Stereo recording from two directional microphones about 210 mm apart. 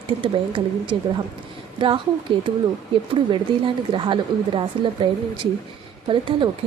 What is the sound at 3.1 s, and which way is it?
A woman's voice, 25° right (ahead or behind).